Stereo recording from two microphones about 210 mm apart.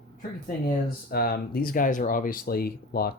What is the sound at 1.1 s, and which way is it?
Speech, 45° left (ahead or behind).